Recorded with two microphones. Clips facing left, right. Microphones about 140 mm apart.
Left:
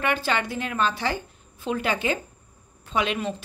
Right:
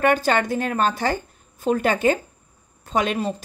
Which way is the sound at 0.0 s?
45° right (ahead or behind).